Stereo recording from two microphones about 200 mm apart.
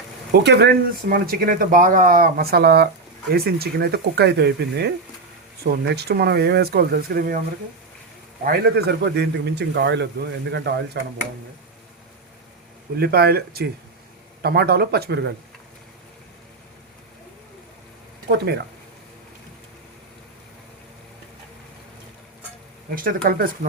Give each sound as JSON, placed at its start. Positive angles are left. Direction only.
{"t": 0.3, "sound": "a man's voice", "side_deg": -55}
{"t": 8.4, "sound": "a man's voice", "side_deg": -50}
{"t": 13.0, "sound": "speech", "side_deg": -50}
{"t": 18.3, "sound": "a man's voice", "side_deg": -55}
{"t": 23.0, "sound": "speech", "side_deg": -45}